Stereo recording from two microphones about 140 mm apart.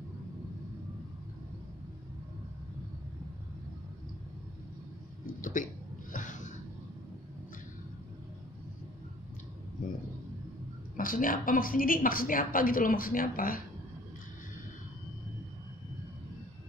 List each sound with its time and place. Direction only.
5.2 s hiccup: 70° left (ahead or behind)
6.1 s a sound: 65° left (ahead or behind)
11.0 s a woman's voice: 80° left